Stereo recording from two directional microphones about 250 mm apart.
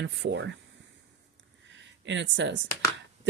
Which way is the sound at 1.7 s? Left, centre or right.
Right.